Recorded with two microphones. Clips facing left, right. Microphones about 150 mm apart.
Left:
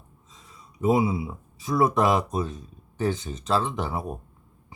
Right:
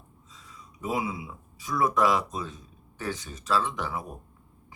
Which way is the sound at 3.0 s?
25° left (ahead or behind).